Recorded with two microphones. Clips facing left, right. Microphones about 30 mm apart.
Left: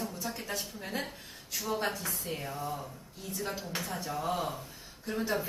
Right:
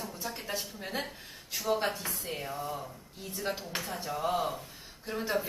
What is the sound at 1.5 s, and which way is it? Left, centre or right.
Speech, right.